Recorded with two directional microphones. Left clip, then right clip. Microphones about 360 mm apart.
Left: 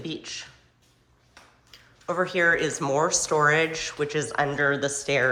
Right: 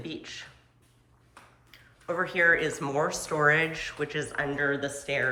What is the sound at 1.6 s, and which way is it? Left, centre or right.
Speech, centre.